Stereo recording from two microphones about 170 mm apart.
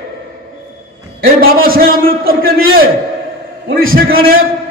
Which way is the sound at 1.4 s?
60° right (ahead or behind).